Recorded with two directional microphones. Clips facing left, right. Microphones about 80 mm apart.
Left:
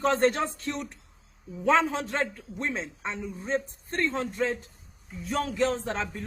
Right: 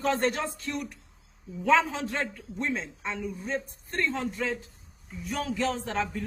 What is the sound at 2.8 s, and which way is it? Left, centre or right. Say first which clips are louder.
A man's voice: even; left.